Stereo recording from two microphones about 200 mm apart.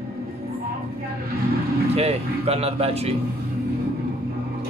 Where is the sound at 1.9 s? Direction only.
30° right (ahead or behind).